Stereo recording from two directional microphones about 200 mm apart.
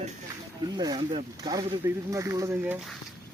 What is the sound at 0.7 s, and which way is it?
Speech, 20° right (ahead or behind).